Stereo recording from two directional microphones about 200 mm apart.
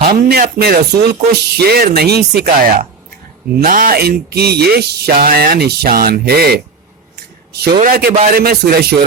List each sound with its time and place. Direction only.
0.1 s speech: 50° right (ahead or behind)
7.2 s a sound: 55° right (ahead or behind)
7.8 s speech: 45° right (ahead or behind)